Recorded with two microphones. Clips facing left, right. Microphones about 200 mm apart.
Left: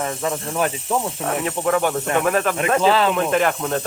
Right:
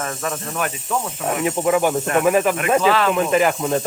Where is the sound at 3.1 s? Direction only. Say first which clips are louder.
Right 2 dB; centre (ahead or behind).